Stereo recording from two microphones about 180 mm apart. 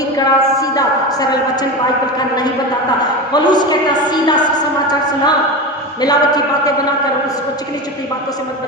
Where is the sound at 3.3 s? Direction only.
25° left (ahead or behind).